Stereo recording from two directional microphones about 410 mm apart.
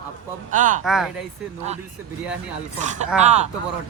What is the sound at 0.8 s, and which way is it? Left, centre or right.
Speech, centre.